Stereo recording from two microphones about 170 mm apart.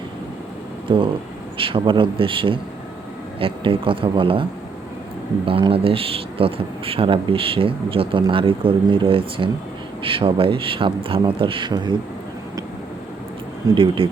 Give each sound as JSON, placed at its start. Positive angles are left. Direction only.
{"t": 0.9, "sound": "speech", "side_deg": -30}
{"t": 5.5, "sound": "speech", "side_deg": -30}
{"t": 13.7, "sound": "speech", "side_deg": -30}